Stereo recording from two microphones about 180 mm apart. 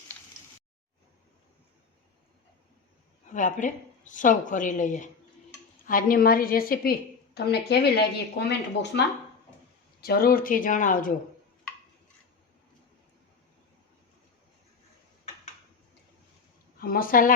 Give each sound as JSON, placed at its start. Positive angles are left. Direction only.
{"t": 3.2, "sound": "a woman's voice", "side_deg": 45}
{"t": 7.3, "sound": "speech", "side_deg": 65}
{"t": 10.0, "sound": "a woman's voice", "side_deg": 55}
{"t": 16.7, "sound": "a woman's voice", "side_deg": 55}